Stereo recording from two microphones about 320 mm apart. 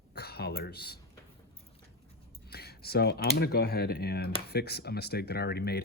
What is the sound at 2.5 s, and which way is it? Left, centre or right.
Speech, left.